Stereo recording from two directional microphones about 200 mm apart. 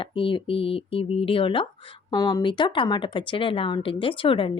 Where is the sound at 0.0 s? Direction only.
25° left (ahead or behind).